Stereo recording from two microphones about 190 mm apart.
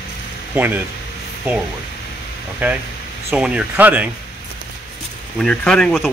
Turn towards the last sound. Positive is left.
turn(degrees=0)  # may be behind; listen again after turning